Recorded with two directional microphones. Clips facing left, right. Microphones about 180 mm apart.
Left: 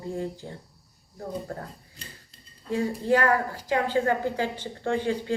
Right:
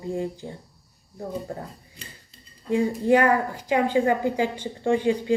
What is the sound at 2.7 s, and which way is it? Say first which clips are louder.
A woman's voice: right 4 dB; 15° right (ahead or behind).